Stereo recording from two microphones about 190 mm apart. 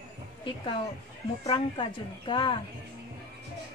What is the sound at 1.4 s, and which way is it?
A woman's voice, 25° left (ahead or behind).